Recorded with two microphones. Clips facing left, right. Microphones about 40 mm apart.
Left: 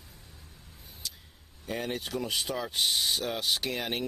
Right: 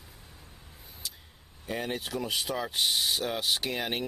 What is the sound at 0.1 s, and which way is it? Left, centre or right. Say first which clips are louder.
Vehicle: right 1 dB; centre.